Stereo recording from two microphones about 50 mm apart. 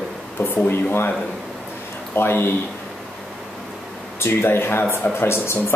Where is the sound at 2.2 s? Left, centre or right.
Left.